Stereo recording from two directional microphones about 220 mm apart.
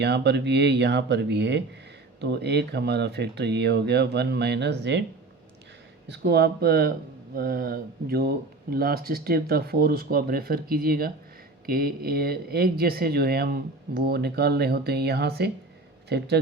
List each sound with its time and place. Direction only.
0.0 s speech: 50° right (ahead or behind)
6.1 s speech: 50° right (ahead or behind)